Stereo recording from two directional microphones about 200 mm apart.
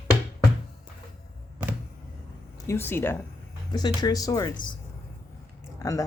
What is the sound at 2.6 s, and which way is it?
Speech, 10° left (ahead or behind).